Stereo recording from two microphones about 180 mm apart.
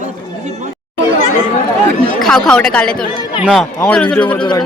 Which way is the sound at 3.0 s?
25° left (ahead or behind).